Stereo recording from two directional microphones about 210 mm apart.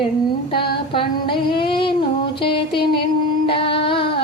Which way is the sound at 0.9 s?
25° left (ahead or behind).